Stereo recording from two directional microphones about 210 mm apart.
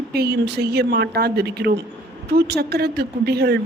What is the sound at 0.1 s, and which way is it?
Speech, 50° right (ahead or behind).